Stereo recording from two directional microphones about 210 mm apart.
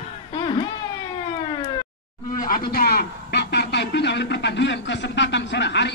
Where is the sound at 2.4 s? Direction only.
45° left (ahead or behind).